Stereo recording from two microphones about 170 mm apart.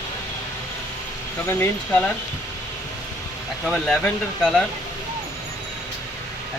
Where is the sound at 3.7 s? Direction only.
5° left (ahead or behind).